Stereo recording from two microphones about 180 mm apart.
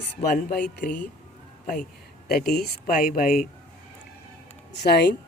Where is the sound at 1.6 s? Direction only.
50° left (ahead or behind).